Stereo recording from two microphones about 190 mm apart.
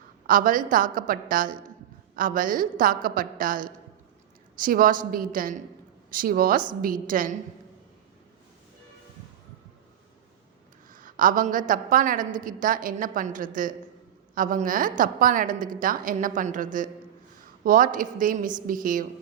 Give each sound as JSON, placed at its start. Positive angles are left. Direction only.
{"t": 0.3, "sound": "a woman's voice", "side_deg": -45}
{"t": 10.9, "sound": "a woman's voice", "side_deg": -45}